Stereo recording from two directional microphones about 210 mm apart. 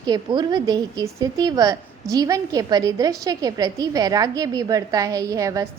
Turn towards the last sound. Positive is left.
turn(degrees=-15)  # may be behind; listen again after turning